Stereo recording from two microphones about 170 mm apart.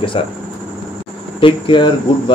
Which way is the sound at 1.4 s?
30° left (ahead or behind).